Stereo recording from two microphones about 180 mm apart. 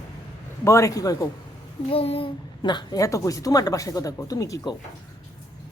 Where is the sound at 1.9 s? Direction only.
30° left (ahead or behind).